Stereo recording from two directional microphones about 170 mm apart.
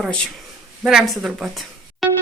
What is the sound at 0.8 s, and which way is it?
A woman's voice, centre (ahead or behind).